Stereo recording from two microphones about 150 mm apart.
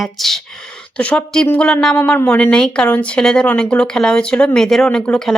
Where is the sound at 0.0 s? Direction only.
Centre (ahead or behind).